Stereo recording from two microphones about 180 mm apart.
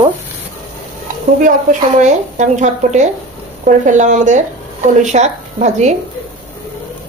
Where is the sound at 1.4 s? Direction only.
45° right (ahead or behind).